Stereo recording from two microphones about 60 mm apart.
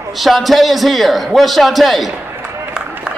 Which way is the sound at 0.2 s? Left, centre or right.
Centre.